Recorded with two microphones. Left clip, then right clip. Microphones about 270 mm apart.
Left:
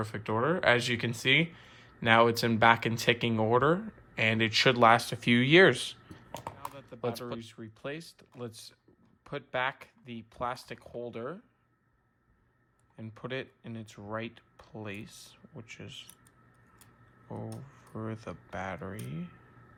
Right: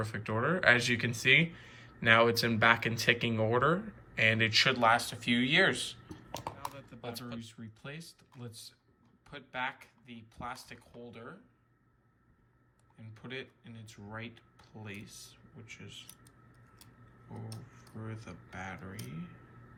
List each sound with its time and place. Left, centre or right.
0.0 s speech: centre
6.1 s computer keyboard: centre
7.0 s speech: left
13.0 s speech: centre
18.0 s speech: centre